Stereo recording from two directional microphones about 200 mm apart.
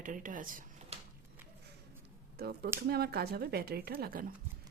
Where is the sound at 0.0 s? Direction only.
40° right (ahead or behind).